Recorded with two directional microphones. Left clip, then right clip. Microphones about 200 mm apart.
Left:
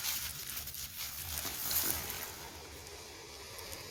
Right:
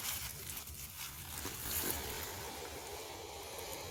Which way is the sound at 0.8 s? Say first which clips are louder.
Left 4 dB; 20° left (ahead or behind).